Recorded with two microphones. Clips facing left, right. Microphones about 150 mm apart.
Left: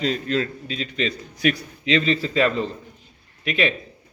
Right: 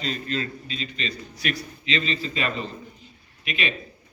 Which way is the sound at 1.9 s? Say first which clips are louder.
Left 7 dB; 70° left (ahead or behind).